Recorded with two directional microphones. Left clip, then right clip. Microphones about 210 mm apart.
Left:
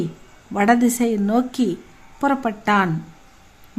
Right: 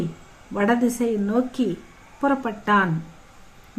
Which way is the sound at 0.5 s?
45° left (ahead or behind).